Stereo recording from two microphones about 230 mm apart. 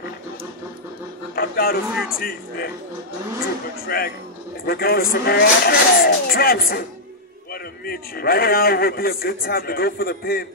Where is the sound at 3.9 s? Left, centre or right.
Left.